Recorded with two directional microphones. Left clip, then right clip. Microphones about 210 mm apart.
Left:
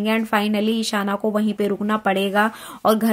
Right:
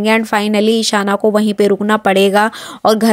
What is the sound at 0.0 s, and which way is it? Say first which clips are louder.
A woman's voice: right 7 dB; 35° right (ahead or behind).